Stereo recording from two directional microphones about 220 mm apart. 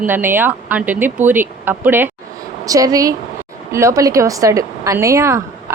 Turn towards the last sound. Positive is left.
turn(degrees=-15)  # may be behind; listen again after turning